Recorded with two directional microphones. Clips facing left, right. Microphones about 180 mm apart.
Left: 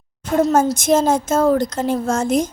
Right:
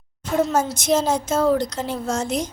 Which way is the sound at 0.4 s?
50° left (ahead or behind).